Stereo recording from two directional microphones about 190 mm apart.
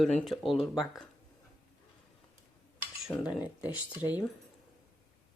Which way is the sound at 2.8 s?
5° right (ahead or behind).